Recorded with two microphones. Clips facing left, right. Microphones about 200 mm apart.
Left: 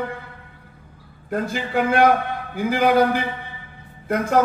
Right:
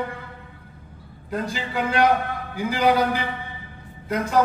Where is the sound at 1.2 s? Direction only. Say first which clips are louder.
Left 3 dB; 50° left (ahead or behind).